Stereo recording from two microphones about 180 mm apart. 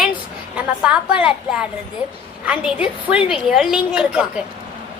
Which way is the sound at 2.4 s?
5° right (ahead or behind).